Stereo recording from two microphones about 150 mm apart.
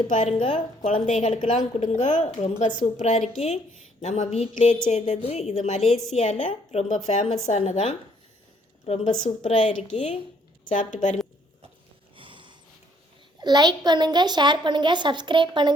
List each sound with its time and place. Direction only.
0.4 s a woman's voice: 35° left (ahead or behind)
5.8 s a woman's voice: centre (ahead or behind)
6.1 s a woman's voice: 45° left (ahead or behind)
12.1 s a sound: 35° right (ahead or behind)
13.4 s a woman's voice: 25° right (ahead or behind)